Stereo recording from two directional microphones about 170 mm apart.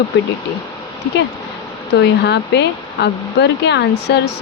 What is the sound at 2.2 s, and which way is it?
Speech, 80° left.